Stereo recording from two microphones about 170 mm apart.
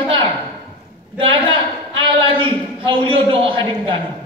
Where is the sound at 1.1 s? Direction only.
30° right (ahead or behind).